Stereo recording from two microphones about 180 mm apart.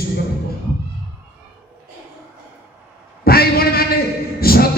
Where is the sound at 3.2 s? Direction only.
60° left (ahead or behind).